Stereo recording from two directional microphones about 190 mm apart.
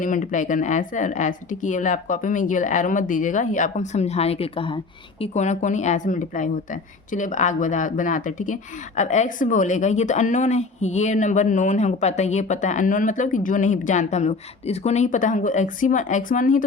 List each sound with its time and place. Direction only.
0.0 s a woman's voice: 45° left (ahead or behind)